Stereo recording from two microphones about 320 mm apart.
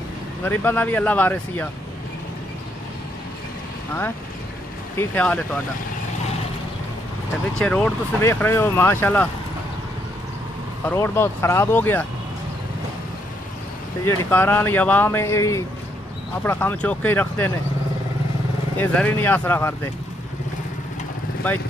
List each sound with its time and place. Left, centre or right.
0.4 s speech: centre
4.9 s speech: centre
7.5 s speech: centre
10.9 s speech: centre
14.0 s speech: centre
18.8 s speech: centre